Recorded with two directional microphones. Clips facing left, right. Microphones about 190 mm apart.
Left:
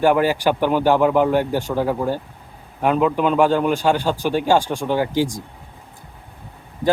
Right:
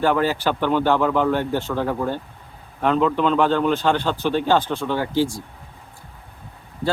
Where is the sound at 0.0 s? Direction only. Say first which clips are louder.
Left 3 dB; 15° left (ahead or behind).